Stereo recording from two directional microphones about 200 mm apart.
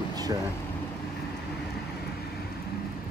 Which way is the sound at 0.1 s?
20° right (ahead or behind).